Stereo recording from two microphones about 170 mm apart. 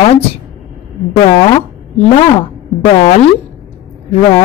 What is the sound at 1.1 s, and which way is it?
Speech, 35° left (ahead or behind).